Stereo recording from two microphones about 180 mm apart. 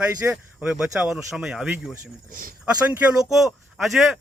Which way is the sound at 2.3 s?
50° right (ahead or behind).